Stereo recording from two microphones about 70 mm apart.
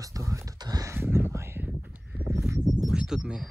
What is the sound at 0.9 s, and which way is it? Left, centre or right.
Speech, right.